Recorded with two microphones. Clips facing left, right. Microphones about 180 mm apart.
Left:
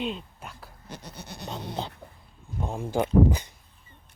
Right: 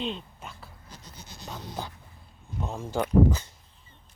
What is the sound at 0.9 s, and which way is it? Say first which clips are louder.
Goat: left 10 dB; 65° left (ahead or behind).